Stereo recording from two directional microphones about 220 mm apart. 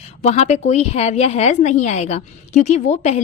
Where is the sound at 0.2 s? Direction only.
30° left (ahead or behind).